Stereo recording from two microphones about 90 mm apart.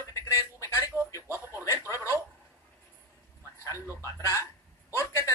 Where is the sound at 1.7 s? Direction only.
30° right (ahead or behind).